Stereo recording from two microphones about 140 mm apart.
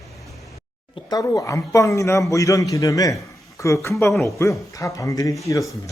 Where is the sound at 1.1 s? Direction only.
25° left (ahead or behind).